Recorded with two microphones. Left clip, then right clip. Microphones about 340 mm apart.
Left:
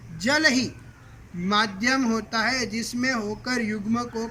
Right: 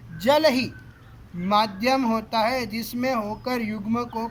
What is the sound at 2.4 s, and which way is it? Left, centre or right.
Speech, right.